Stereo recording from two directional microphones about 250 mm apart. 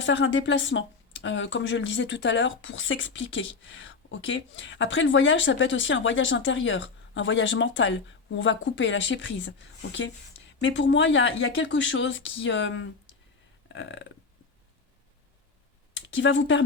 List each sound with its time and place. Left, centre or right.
0.0 s speech: left
16.0 s speech: left